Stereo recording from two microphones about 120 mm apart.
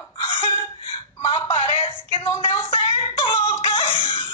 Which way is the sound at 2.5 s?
45° left (ahead or behind).